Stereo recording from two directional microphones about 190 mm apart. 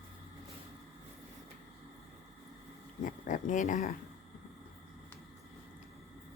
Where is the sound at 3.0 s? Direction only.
45° left (ahead or behind).